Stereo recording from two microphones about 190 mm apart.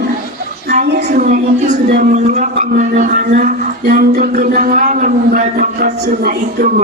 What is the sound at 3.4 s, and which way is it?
Speech, 50° right (ahead or behind).